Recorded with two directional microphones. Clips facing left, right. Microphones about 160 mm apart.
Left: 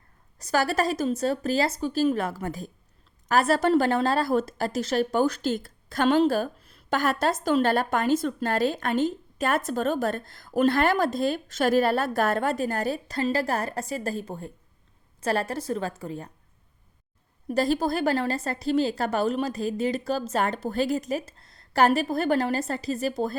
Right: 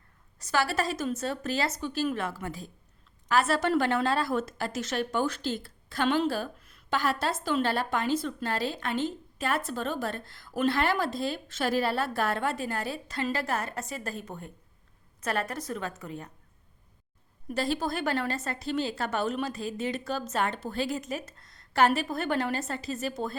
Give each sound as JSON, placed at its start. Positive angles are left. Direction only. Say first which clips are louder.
{"t": 0.3, "sound": "a woman's voice", "louder": "left 4 dB", "side_deg": 40}
{"t": 6.6, "sound": "a sound", "louder": "left 3 dB", "side_deg": 30}
{"t": 6.9, "sound": "a woman's voice", "louder": "left 4 dB", "side_deg": 45}
{"t": 17.5, "sound": "a woman's voice", "louder": "left 6 dB", "side_deg": 40}